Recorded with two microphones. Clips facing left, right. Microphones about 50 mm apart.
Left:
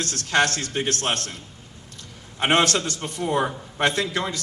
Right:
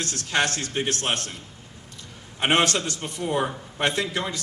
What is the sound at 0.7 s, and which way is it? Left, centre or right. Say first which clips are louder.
Speech: left 1 dB; left.